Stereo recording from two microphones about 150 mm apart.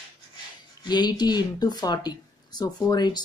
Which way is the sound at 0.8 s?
30° left (ahead or behind).